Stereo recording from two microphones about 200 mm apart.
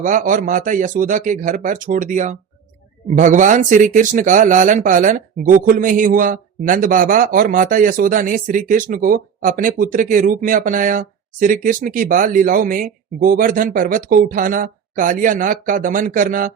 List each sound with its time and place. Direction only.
0.0 s speech: 40° right (ahead or behind)